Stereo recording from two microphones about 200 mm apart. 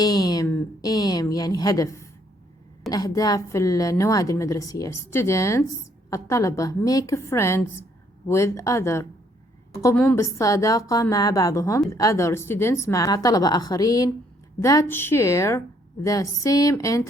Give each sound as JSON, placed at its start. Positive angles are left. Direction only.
{"t": 0.0, "sound": "a woman's voice", "side_deg": 20}